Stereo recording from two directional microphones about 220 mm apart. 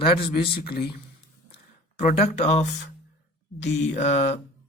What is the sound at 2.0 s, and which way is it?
Speech, 30° left (ahead or behind).